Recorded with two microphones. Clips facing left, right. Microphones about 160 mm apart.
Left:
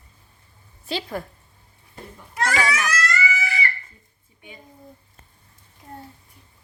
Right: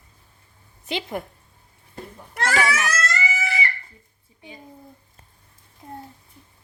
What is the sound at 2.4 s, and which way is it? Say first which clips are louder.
Speech: right 1 dB; 20° right (ahead or behind).